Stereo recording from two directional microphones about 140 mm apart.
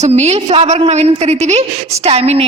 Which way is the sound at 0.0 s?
50° right (ahead or behind).